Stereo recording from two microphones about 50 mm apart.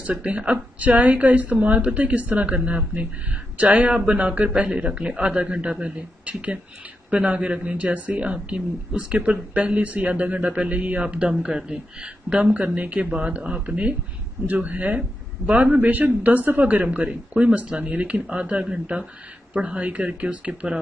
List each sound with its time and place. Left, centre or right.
0.0 s speech: right